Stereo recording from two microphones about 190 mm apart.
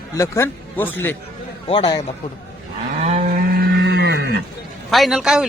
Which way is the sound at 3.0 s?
40° right (ahead or behind).